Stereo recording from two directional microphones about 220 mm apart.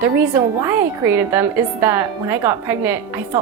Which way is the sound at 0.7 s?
10° right (ahead or behind).